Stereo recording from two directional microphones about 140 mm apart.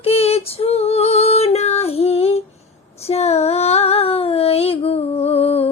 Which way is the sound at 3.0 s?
50° left (ahead or behind).